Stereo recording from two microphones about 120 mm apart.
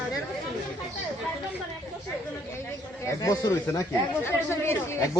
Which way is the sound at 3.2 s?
30° left (ahead or behind).